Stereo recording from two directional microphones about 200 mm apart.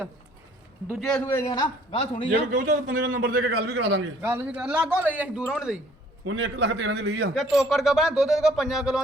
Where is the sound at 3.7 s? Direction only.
65° right (ahead or behind).